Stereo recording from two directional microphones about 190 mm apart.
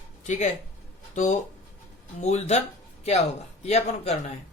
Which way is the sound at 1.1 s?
40° left (ahead or behind).